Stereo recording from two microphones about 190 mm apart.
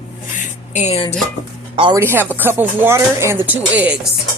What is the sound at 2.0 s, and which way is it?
Speech, 10° right (ahead or behind).